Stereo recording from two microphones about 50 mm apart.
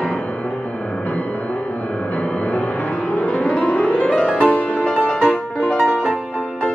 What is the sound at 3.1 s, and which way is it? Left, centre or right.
Music, left.